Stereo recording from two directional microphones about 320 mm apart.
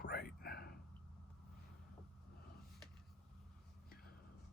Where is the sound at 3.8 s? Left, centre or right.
Left.